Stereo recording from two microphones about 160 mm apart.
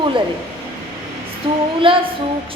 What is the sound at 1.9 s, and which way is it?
Speech, 35° right (ahead or behind).